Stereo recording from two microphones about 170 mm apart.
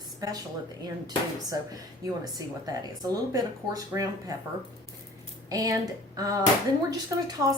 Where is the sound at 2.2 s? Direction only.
20° right (ahead or behind).